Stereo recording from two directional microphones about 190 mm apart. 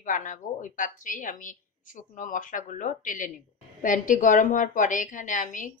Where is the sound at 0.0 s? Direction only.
40° left (ahead or behind).